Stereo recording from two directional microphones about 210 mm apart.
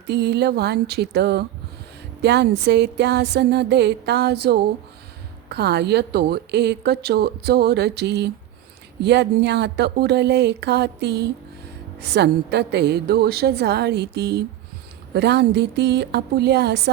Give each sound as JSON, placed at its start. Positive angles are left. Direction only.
{"t": 0.1, "sound": "a woman's voice", "side_deg": -50}